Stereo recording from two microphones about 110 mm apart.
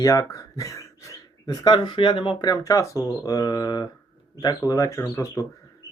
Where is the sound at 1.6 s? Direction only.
45° left (ahead or behind); by 5.5 s 30° left (ahead or behind).